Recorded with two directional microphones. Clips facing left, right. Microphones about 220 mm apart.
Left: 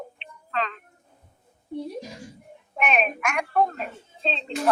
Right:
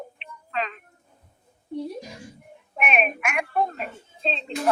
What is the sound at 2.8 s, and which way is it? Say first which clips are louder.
Speech: left 1 dB; 5° right (ahead or behind).